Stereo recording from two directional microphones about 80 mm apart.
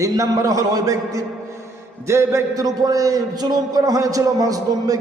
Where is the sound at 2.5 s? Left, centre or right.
Right.